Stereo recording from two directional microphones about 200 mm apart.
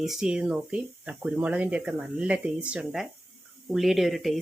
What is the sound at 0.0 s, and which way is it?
Speech, centre (ahead or behind).